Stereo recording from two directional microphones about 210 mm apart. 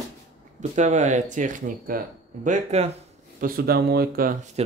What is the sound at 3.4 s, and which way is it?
Speech, 45° right (ahead or behind).